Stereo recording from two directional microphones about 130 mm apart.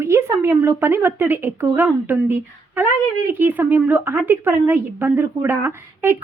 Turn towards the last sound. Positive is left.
turn(degrees=-15)  # may be behind; listen again after turning